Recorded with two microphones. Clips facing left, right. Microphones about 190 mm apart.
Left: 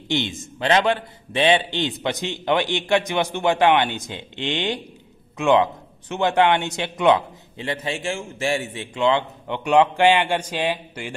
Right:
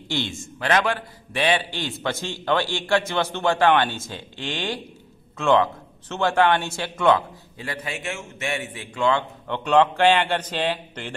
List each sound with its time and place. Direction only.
0.1 s a man's voice: 20° left (ahead or behind)